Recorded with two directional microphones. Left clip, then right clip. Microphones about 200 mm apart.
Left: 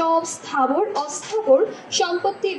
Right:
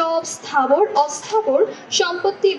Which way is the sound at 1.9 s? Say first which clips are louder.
Right 2 dB; 30° right (ahead or behind).